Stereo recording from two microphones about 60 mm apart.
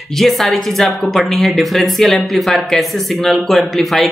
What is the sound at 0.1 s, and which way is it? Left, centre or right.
Speech, centre.